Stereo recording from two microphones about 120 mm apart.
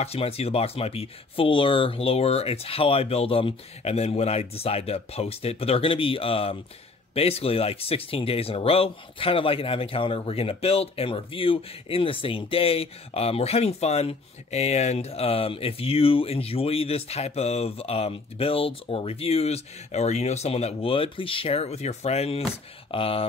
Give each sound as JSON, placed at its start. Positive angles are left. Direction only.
{"t": 0.0, "sound": "speech", "side_deg": 55}
{"t": 22.5, "sound": "speech", "side_deg": 50}